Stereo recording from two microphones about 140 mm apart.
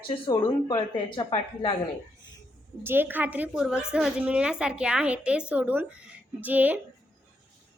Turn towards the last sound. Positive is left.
turn(degrees=-10)  # may be behind; listen again after turning